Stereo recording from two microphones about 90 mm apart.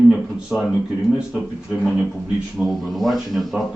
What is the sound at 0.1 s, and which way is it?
Speech, 10° right (ahead or behind).